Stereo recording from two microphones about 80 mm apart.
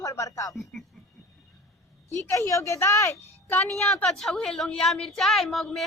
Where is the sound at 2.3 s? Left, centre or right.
Left.